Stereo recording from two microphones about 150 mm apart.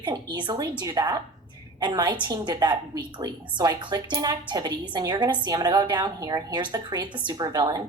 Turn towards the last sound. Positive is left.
turn(degrees=-30)  # may be behind; listen again after turning